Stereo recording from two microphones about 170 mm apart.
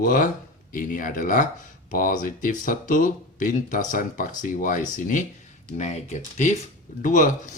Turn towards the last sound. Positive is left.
turn(degrees=50)  # may be behind; listen again after turning